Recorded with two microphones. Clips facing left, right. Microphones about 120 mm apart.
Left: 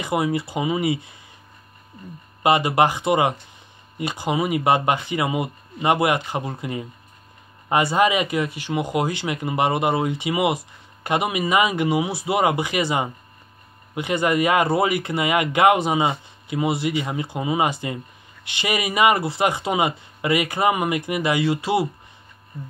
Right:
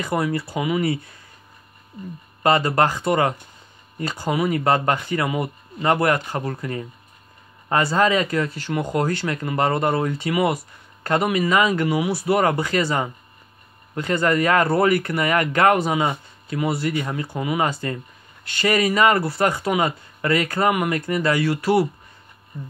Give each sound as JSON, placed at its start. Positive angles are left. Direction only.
{"t": 0.0, "sound": "speech", "side_deg": 15}
{"t": 2.4, "sound": "speech", "side_deg": 15}